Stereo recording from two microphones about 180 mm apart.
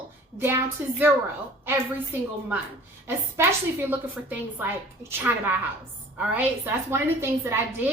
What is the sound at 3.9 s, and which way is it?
A woman's voice, 10° right (ahead or behind).